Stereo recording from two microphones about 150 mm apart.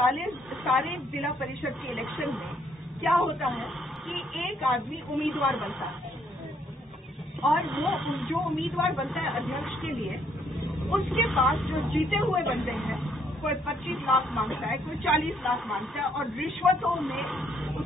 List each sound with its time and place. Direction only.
0.1 s speech: centre (ahead or behind)
7.4 s speech: centre (ahead or behind)